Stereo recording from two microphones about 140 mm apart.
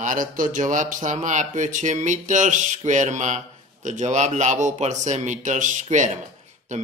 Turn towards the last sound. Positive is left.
turn(degrees=-60)  # may be behind; listen again after turning